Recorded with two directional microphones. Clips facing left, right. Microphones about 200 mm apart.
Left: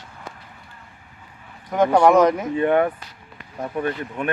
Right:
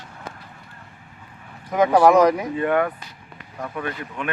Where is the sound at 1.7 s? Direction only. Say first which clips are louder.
Even; centre (ahead or behind).